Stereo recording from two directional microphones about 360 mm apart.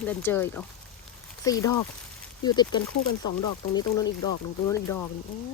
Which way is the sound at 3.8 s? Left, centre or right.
Centre.